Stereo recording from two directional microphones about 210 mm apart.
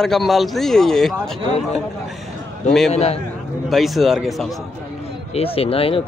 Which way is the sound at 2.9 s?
30° left (ahead or behind).